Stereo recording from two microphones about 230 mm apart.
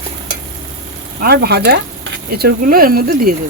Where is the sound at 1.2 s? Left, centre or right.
Right.